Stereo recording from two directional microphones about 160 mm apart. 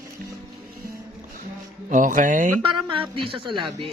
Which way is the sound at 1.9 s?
50° right (ahead or behind).